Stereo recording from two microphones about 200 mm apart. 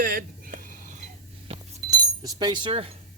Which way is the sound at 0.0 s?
45° right (ahead or behind).